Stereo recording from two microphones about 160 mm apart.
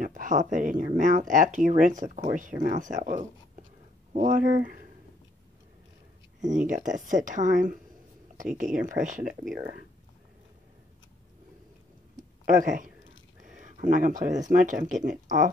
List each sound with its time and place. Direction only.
0.0 s speech: 55° right (ahead or behind)
6.4 s speech: 50° right (ahead or behind)
12.4 s speech: 55° right (ahead or behind)